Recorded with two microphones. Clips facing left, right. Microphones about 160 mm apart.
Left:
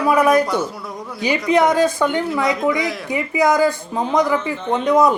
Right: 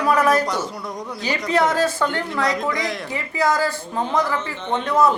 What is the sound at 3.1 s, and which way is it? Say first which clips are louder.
Speech: left 5 dB; 15° left (ahead or behind).